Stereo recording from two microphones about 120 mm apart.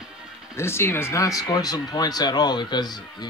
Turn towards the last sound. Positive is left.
turn(degrees=35)  # may be behind; listen again after turning